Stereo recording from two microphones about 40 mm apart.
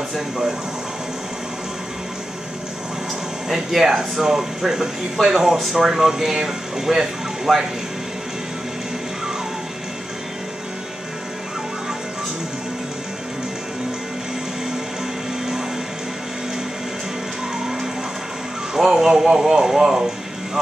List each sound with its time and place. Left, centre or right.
3.4 s speech: centre
18.7 s speech: centre